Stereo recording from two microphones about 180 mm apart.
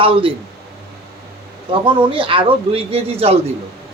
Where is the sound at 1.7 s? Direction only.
30° right (ahead or behind).